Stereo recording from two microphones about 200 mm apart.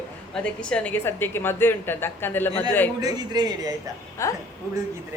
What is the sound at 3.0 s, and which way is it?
Speech, 20° right (ahead or behind).